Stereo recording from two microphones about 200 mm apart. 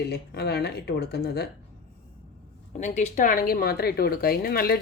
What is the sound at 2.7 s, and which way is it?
Speech, 35° left (ahead or behind).